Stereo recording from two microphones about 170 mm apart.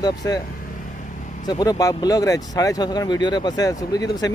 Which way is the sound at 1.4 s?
20° left (ahead or behind).